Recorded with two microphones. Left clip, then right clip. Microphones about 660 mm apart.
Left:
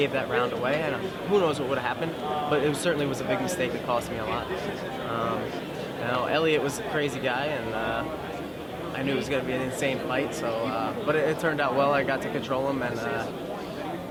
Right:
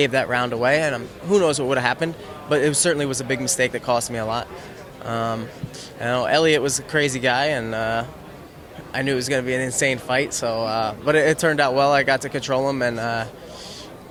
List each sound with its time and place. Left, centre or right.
0.0 s speech: right
6.1 s speech: right
9.0 s speech: right